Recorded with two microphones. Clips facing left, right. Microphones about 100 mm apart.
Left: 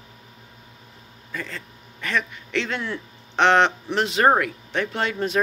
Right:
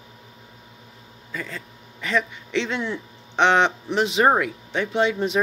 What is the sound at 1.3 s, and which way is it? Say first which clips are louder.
A man's voice: even; 15° right (ahead or behind).